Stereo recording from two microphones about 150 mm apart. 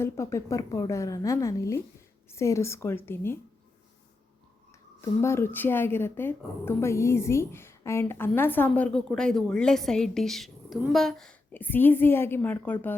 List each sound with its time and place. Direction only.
0.0 s a woman's voice: 20° left (ahead or behind)
4.9 s a woman's voice: 15° left (ahead or behind)